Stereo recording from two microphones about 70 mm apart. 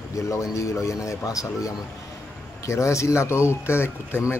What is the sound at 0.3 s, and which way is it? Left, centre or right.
Speech, left.